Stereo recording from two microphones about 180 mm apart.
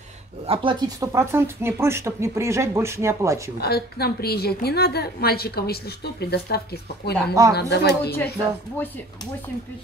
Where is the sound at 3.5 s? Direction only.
60° left (ahead or behind).